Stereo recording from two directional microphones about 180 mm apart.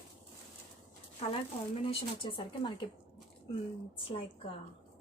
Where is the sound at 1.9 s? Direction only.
30° left (ahead or behind).